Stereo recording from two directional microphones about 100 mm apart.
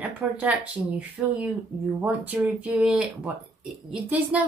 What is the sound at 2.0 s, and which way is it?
Speech, 15° right (ahead or behind).